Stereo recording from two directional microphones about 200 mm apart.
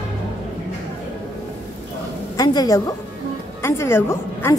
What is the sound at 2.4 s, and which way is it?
A woman's voice, 20° left (ahead or behind).